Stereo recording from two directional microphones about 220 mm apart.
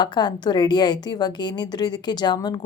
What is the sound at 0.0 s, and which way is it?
A woman's voice, 20° left (ahead or behind).